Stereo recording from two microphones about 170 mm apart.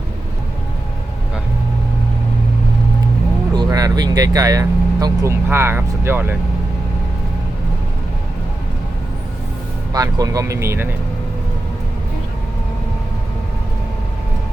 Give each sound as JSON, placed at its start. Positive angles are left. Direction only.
{"t": 3.5, "sound": "speech", "side_deg": -25}
{"t": 9.9, "sound": "speech", "side_deg": -20}